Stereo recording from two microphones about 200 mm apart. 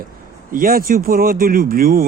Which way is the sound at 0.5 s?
45° right (ahead or behind).